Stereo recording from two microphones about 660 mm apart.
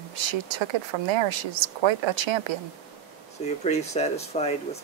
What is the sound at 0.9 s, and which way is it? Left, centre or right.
A woman's voice, right.